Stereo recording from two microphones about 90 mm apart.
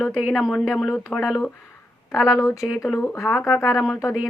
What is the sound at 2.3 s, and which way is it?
Speech, 35° left (ahead or behind).